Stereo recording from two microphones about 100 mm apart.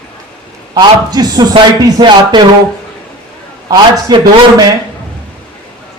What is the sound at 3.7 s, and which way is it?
Speech, 40° right (ahead or behind).